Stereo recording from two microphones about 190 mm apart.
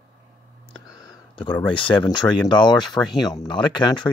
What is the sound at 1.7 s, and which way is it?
Speech, 25° left (ahead or behind).